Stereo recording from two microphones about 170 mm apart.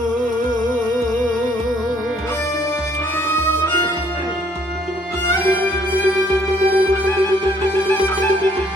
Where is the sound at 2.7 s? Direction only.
15° left (ahead or behind).